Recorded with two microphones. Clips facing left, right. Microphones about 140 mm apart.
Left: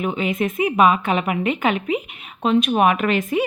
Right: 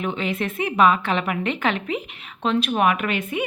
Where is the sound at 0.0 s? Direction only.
10° left (ahead or behind).